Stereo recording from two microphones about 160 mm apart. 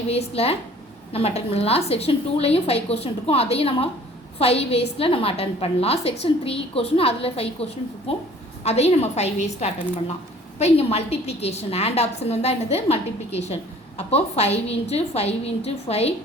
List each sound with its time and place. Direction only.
0.1 s a woman's voice: 40° left (ahead or behind)